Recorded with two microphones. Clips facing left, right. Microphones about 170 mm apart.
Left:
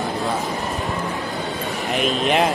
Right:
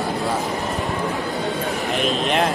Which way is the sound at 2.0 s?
Centre (ahead or behind).